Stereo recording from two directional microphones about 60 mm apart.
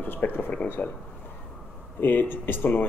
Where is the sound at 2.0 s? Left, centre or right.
Left.